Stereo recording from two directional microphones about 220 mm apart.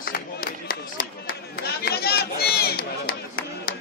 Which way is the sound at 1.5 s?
45° left (ahead or behind).